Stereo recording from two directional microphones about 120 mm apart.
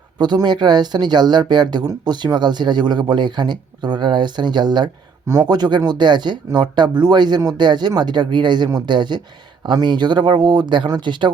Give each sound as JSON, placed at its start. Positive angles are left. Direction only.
{"t": 0.2, "sound": "speech", "side_deg": -35}